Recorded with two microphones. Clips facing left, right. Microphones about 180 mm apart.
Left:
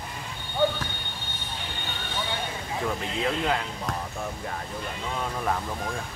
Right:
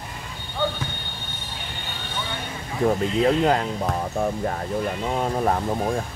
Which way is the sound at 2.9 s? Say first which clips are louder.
Right 10 dB; 40° right (ahead or behind).